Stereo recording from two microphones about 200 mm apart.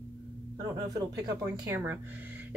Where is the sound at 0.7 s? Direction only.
20° right (ahead or behind).